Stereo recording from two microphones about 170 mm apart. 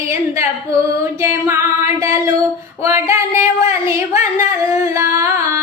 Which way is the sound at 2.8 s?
15° right (ahead or behind).